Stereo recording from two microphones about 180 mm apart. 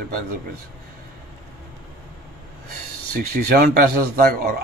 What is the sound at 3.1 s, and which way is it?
Speech, 55° right (ahead or behind).